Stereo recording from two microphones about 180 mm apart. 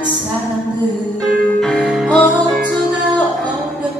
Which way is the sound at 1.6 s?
Centre (ahead or behind).